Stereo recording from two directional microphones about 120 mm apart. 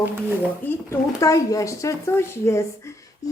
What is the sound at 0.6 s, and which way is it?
A woman's voice, 25° left (ahead or behind).